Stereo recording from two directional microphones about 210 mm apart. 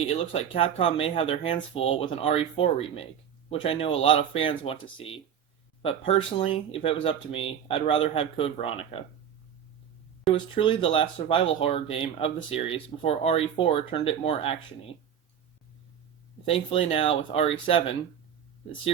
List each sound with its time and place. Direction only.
0.1 s speech: 25° left (ahead or behind)
5.8 s speech: 25° left (ahead or behind)
10.3 s speech: 25° left (ahead or behind)
16.5 s speech: 25° left (ahead or behind)